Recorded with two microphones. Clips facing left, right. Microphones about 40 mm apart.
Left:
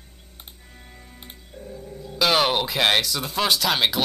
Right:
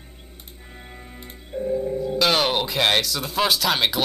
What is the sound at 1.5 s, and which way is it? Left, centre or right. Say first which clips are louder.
Music: right 15 dB; right.